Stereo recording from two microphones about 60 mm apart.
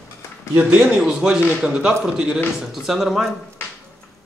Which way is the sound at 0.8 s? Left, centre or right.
Centre.